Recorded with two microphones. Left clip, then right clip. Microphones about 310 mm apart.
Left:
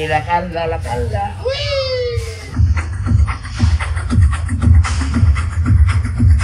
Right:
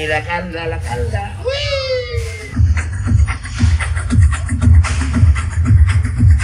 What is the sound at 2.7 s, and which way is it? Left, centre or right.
Music, left.